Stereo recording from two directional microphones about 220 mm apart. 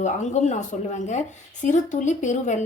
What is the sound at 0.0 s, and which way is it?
Speech, 30° left (ahead or behind).